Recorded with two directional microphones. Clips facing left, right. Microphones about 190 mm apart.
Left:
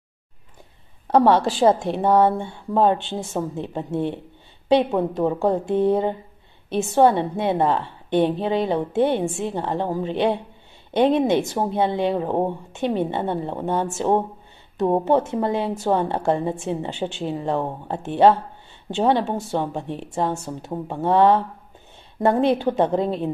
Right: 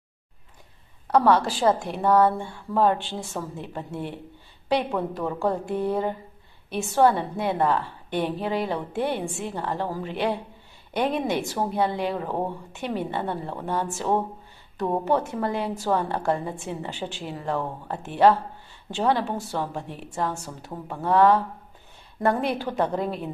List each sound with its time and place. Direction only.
1.0 s a woman's voice: 25° left (ahead or behind)